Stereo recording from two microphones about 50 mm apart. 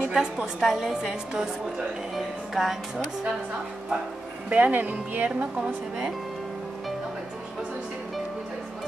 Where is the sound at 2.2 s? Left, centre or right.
Centre.